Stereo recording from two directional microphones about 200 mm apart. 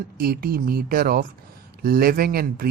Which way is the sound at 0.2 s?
50° right (ahead or behind).